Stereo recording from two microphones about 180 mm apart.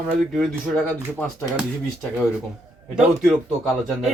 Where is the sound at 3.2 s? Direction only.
Centre (ahead or behind).